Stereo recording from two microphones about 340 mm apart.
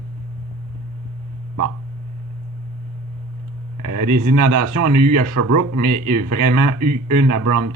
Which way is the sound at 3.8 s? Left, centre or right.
Right.